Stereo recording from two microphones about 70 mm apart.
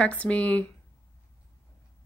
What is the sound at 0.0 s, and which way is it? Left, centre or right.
Speech, centre.